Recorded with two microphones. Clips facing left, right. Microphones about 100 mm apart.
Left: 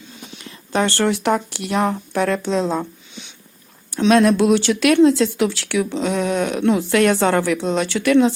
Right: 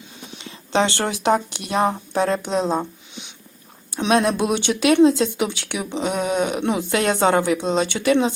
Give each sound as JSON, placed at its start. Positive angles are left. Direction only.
{"t": 0.7, "sound": "speech", "side_deg": -20}
{"t": 3.9, "sound": "speech", "side_deg": -20}